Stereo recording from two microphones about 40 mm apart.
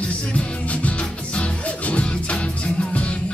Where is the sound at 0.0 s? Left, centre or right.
Left.